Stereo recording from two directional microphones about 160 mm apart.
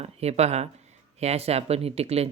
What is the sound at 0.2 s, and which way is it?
Speech, 40° right (ahead or behind).